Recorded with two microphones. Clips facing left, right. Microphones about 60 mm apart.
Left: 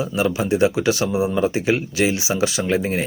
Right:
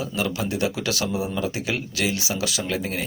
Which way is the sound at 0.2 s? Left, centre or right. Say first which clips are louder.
Left 7 dB; left.